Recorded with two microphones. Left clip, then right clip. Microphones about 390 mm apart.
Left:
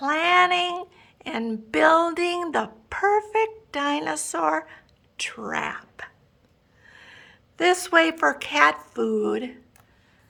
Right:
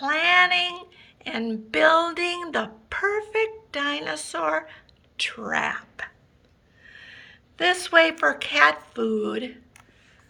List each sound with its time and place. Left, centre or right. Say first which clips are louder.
0.0 s speech: even; centre
6.8 s a sound: right 3 dB; centre
7.6 s speech: even; centre